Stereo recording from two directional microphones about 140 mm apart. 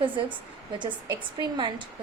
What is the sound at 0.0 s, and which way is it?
Speech, 35° right (ahead or behind).